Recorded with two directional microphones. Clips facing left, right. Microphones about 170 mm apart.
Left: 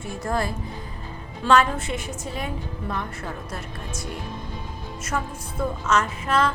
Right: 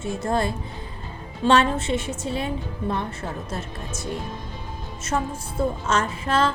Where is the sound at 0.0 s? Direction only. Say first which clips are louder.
Right 3 dB; 25° right (ahead or behind).